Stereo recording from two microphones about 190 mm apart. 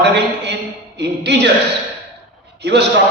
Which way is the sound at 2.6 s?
65° right (ahead or behind).